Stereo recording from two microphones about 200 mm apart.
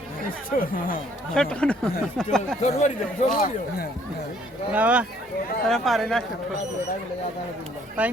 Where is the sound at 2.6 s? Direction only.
35° left (ahead or behind).